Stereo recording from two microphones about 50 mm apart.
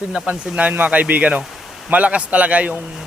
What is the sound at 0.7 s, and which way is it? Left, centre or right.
Speech, right.